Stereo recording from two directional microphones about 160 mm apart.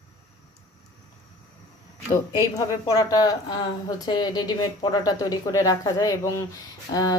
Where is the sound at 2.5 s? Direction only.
20° left (ahead or behind).